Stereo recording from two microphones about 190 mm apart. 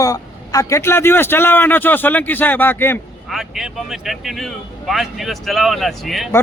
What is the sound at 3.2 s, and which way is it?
Speech, centre (ahead or behind).